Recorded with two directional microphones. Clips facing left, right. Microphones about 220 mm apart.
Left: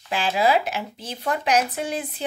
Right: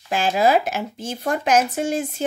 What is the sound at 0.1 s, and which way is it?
Speech, 45° right (ahead or behind).